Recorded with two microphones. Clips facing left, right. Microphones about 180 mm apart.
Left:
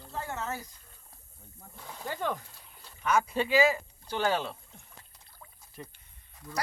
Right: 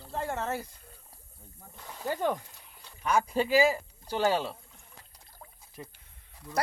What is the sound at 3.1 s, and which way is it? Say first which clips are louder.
A man's voice: right 1 dB; 35° right (ahead or behind).